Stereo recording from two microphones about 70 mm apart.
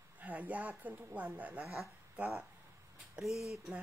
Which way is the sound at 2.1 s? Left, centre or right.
Right.